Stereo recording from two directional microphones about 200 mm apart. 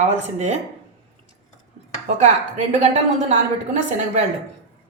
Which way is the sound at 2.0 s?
35° right (ahead or behind).